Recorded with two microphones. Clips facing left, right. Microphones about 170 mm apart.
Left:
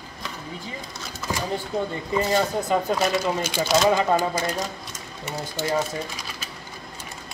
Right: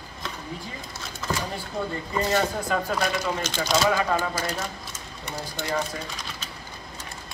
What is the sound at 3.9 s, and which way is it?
Speech, 20° left (ahead or behind).